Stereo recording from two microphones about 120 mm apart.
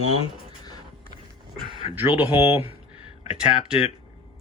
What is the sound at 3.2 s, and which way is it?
Speech, 55° left (ahead or behind).